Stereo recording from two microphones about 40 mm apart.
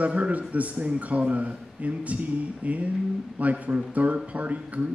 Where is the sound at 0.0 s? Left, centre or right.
Right.